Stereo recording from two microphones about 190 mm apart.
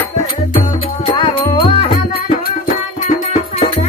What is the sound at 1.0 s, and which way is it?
Music, 25° left (ahead or behind).